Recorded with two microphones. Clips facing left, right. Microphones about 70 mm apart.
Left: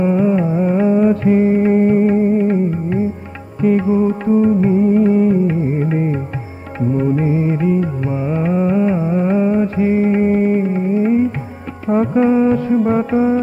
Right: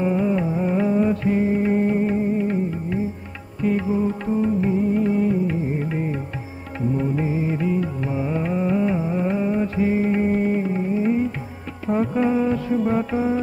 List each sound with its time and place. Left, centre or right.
0.0 s carnatic music: left
1.0 s music: left